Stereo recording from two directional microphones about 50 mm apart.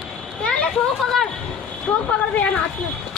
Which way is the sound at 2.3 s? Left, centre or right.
Left.